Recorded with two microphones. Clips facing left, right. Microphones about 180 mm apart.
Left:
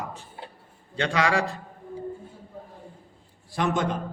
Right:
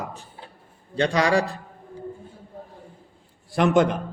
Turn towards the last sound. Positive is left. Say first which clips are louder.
# right 7 dB
turn(degrees=-65)  # may be behind; listen again after turning